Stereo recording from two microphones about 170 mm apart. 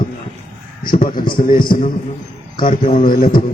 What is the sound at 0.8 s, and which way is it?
Speech, 55° left (ahead or behind).